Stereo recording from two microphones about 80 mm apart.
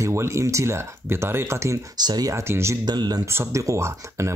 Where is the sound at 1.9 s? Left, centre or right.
Right.